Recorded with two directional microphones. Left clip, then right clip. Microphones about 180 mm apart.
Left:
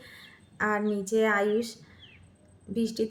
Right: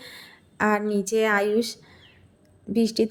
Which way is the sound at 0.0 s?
50° right (ahead or behind).